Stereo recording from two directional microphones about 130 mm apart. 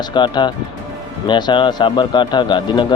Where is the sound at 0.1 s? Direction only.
35° left (ahead or behind).